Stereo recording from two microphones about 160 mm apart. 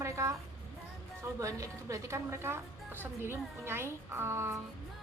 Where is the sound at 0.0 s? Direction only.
20° right (ahead or behind).